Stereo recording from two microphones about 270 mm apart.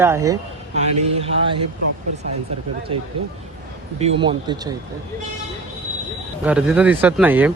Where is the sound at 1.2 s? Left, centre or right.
Right.